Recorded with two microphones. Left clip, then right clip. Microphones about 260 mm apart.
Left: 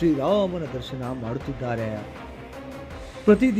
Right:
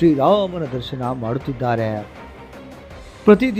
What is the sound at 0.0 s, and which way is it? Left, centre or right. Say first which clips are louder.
Speech: right 6 dB; centre.